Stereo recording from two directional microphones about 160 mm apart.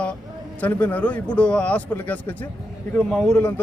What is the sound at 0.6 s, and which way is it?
A man's voice, 10° left (ahead or behind).